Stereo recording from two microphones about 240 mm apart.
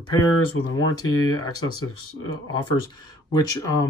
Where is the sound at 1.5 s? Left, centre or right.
Left.